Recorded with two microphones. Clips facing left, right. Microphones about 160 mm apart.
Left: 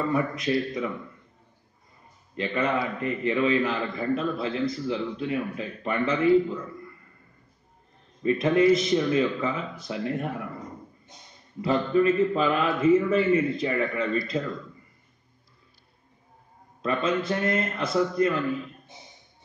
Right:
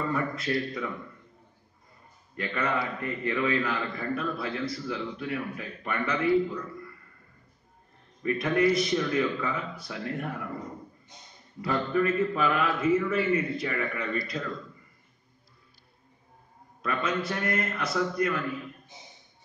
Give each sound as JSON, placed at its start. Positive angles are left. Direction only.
{"t": 0.1, "sound": "a man's voice", "side_deg": 20}
{"t": 2.3, "sound": "a man's voice", "side_deg": 20}
{"t": 8.2, "sound": "a man's voice", "side_deg": 25}
{"t": 11.6, "sound": "a man's voice", "side_deg": 25}
{"t": 16.8, "sound": "a man's voice", "side_deg": 25}